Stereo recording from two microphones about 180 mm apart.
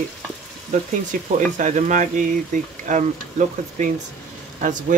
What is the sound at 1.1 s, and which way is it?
Speech, 50° right (ahead or behind).